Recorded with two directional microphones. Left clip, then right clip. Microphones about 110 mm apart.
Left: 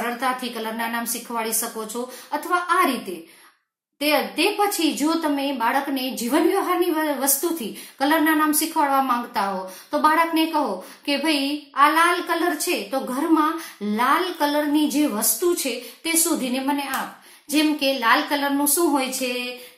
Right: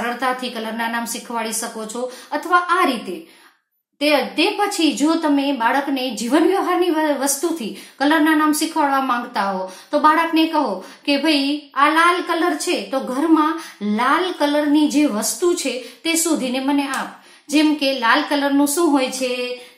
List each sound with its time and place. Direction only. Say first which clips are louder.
0.2 s speech: right 3 dB; 15° right (ahead or behind)